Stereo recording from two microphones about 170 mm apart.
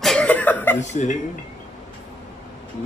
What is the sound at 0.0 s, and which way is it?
Chuckle, 5° left (ahead or behind).